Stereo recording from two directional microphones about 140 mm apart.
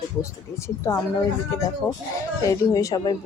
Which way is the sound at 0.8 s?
20° left (ahead or behind).